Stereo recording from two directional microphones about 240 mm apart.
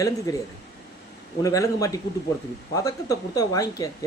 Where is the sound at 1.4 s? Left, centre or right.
Centre.